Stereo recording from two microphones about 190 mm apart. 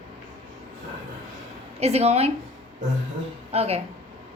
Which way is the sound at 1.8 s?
35° right (ahead or behind).